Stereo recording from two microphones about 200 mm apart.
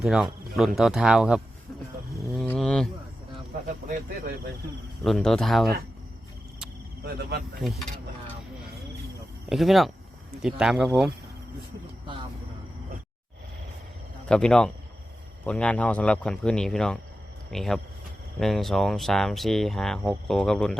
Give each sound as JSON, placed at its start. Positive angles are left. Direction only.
{"t": 0.0, "sound": "speech", "side_deg": 0}
{"t": 2.4, "sound": "a sound", "side_deg": 5}
{"t": 3.8, "sound": "speech", "side_deg": -45}
{"t": 5.0, "sound": "speech", "side_deg": 0}
{"t": 7.0, "sound": "speech", "side_deg": -50}
{"t": 9.5, "sound": "speech", "side_deg": 0}
{"t": 14.3, "sound": "speech", "side_deg": 5}